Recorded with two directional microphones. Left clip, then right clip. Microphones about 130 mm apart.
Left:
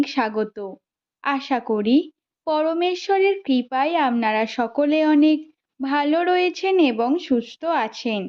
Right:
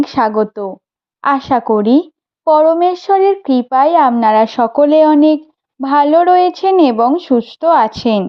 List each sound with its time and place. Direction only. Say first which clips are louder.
0.0 s speech: right 9 dB; 35° right (ahead or behind); by 8.2 s 60° right (ahead or behind)